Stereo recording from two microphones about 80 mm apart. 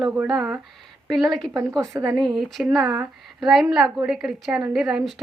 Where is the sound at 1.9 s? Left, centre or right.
Right.